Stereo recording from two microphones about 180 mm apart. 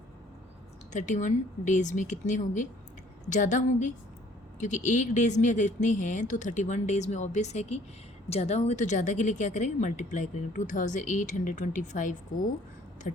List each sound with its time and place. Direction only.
0.9 s speech: 45° left (ahead or behind)